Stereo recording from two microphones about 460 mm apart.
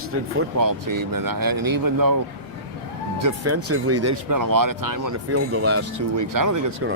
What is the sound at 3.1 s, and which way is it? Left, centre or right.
Speech, right.